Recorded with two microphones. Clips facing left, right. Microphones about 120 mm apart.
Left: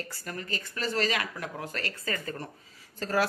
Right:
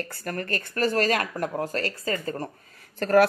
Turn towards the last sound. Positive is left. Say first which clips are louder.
# right 9 dB
turn(degrees=-60)  # may be behind; listen again after turning